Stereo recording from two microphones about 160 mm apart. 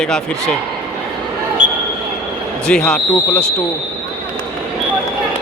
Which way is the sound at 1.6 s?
50° right (ahead or behind).